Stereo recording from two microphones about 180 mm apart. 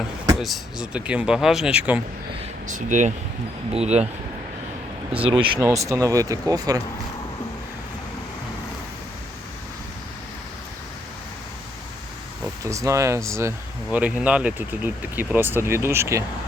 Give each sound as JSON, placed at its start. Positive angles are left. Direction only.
{"t": 0.3, "sound": "speech", "side_deg": 0}
{"t": 2.6, "sound": "speech", "side_deg": -45}
{"t": 5.2, "sound": "speech", "side_deg": -25}
{"t": 5.5, "sound": "speech", "side_deg": -15}
{"t": 12.6, "sound": "speech", "side_deg": -15}